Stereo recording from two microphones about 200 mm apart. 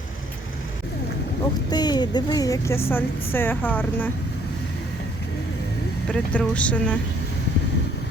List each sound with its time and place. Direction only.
1.7 s a woman's voice: 20° left (ahead or behind)
6.1 s a woman's voice: 5° left (ahead or behind)